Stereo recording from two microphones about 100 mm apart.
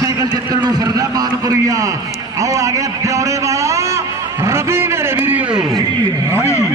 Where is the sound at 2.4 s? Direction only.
35° right (ahead or behind).